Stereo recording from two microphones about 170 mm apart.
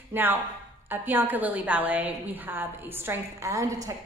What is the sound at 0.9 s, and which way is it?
A woman's voice, 10° right (ahead or behind).